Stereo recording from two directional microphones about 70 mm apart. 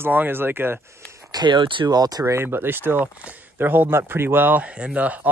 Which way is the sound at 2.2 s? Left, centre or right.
Right.